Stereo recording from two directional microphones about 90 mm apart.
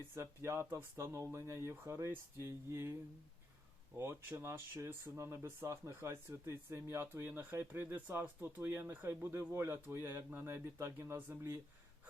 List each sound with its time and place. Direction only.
0.1 s speech: 30° right (ahead or behind)
3.9 s speech: 30° right (ahead or behind)